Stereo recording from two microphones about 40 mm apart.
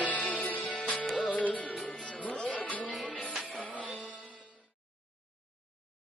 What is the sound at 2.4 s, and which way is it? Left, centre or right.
Music, left.